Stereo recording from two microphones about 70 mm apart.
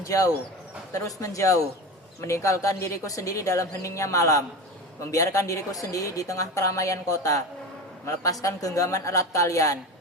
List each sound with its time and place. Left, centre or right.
0.0 s a woman's voice: left